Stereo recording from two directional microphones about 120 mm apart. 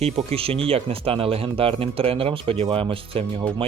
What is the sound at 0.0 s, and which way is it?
Speech, 55° right (ahead or behind).